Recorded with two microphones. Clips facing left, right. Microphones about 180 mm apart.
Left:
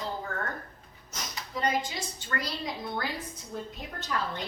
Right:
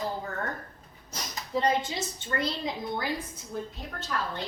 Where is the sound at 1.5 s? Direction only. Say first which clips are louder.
Right 3 dB; 30° right (ahead or behind).